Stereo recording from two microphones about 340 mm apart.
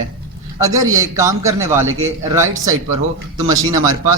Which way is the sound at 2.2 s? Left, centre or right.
Centre.